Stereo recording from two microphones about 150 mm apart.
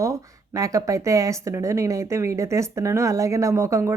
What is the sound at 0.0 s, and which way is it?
Speech, 20° right (ahead or behind).